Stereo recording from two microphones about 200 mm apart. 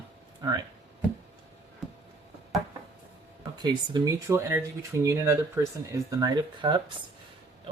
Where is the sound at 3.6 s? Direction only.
20° right (ahead or behind).